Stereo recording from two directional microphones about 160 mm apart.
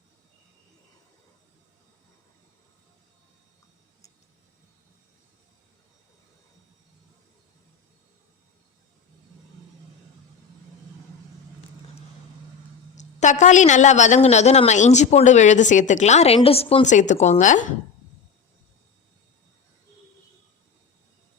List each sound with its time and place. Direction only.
13.0 s a man's voice: 50° left (ahead or behind)